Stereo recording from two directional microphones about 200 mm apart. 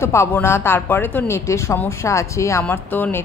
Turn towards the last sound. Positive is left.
turn(degrees=10)  # may be behind; listen again after turning